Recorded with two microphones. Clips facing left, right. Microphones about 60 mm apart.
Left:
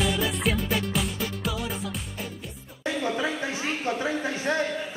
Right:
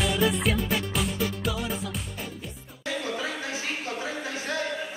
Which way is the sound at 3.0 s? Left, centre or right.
Centre.